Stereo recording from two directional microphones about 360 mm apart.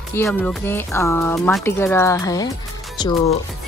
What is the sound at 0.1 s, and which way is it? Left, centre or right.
Speech, centre.